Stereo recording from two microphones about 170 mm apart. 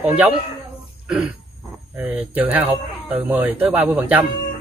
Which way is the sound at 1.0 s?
10° right (ahead or behind).